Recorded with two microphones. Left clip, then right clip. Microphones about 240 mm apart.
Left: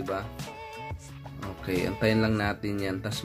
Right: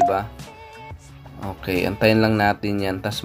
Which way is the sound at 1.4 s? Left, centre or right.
Centre.